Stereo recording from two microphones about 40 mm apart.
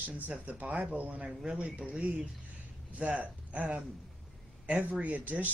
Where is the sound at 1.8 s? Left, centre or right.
Right.